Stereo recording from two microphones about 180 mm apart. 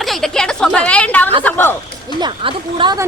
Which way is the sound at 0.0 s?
Centre (ahead or behind).